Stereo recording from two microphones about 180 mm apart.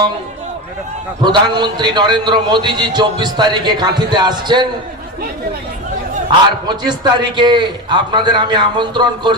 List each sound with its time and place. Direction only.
1.2 s a man's voice: 25° right (ahead or behind)
6.7 s a man's voice: 25° right (ahead or behind)